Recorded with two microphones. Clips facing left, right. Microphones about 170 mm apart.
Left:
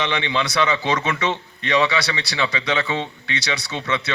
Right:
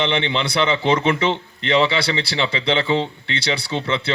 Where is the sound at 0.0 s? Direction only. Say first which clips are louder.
Right 2 dB; 25° right (ahead or behind).